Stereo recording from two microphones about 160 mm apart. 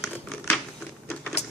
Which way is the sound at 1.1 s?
5° left (ahead or behind).